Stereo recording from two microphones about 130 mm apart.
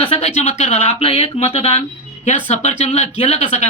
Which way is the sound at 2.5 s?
60° left (ahead or behind).